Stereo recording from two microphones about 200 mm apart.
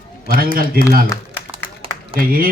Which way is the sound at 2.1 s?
45° right (ahead or behind).